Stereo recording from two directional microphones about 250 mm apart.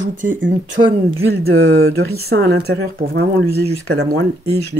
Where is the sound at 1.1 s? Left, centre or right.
Right.